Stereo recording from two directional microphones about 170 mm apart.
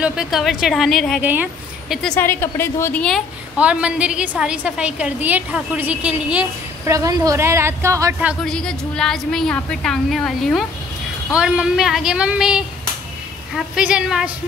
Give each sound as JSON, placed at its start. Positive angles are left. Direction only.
{"t": 0.0, "sound": "a woman's voice", "side_deg": -5}
{"t": 1.2, "sound": "speech", "side_deg": -10}
{"t": 2.0, "sound": "a woman's voice", "side_deg": 10}
{"t": 6.9, "sound": "a woman's voice", "side_deg": -20}
{"t": 8.5, "sound": "a woman's voice", "side_deg": 5}